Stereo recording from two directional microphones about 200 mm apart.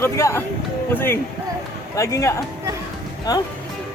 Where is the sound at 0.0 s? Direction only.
15° left (ahead or behind).